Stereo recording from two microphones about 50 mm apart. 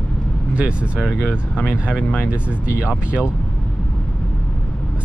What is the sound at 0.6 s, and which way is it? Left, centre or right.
Speech, right.